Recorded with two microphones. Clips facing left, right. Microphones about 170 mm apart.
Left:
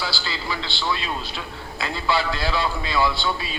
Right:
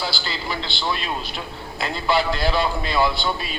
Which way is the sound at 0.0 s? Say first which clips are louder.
Right 1 dB; 20° right (ahead or behind).